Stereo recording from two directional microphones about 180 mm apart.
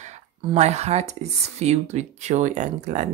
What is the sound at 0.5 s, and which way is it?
Speech, 40° right (ahead or behind).